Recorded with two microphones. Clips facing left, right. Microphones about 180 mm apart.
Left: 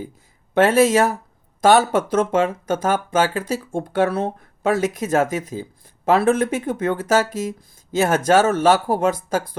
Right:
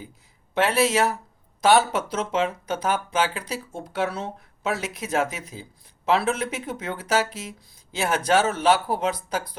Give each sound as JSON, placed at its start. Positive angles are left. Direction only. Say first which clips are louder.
{"t": 0.5, "sound": "speech", "louder": "left 7 dB", "side_deg": 45}